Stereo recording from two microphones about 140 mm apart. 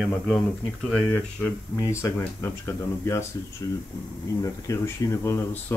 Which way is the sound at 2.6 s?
20° left (ahead or behind).